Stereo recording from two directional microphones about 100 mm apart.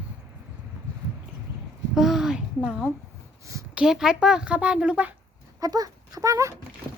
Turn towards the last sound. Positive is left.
turn(degrees=-35)  # may be behind; listen again after turning